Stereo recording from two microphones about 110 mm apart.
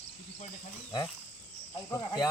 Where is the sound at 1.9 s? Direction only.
30° left (ahead or behind).